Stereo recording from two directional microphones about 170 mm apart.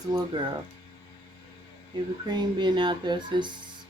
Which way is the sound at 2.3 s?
25° right (ahead or behind).